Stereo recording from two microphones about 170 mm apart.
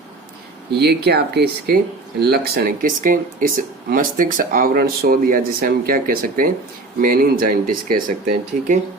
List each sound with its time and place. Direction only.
0.7 s speech: 75° right (ahead or behind); by 8.7 s 50° right (ahead or behind)